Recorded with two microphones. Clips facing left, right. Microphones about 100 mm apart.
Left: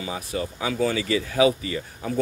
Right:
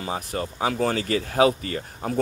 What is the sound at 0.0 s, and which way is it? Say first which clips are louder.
A man's voice: right 1 dB; 45° right (ahead or behind).